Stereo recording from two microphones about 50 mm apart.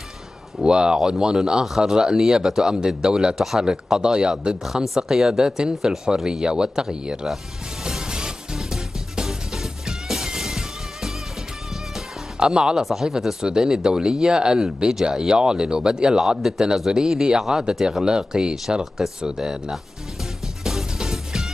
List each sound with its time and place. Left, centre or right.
0.7 s speech: centre
7.8 s music: centre
12.4 s speech: centre
20.6 s music: centre